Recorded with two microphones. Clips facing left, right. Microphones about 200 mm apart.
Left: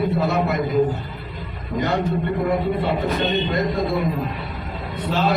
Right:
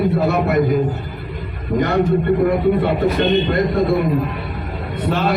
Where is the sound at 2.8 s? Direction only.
55° right (ahead or behind).